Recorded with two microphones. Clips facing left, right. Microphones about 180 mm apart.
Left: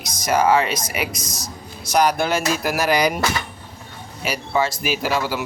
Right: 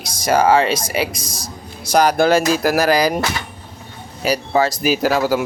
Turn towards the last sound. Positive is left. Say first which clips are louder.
# right 6 dB
turn(degrees=-40)  # may be behind; listen again after turning